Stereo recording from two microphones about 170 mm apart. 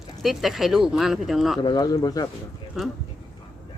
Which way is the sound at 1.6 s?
25° left (ahead or behind).